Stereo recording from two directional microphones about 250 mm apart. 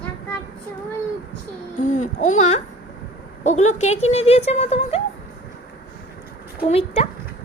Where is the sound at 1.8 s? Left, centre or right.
Left.